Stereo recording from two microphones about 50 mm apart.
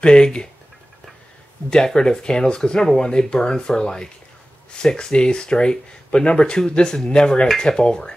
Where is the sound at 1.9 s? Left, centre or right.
Centre.